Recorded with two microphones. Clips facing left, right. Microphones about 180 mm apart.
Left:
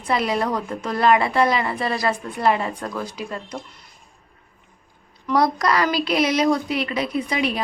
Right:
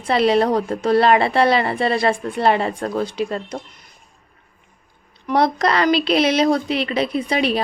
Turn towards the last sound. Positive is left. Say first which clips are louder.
# right 3 dB
turn(degrees=-30)  # may be behind; listen again after turning